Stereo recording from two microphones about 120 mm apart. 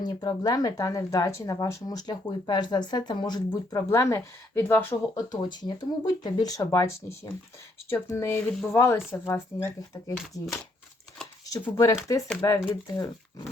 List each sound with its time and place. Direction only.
0.0 s speech: 35° left (ahead or behind)
5.3 s speech: 40° left (ahead or behind)
11.7 s speech: 25° left (ahead or behind)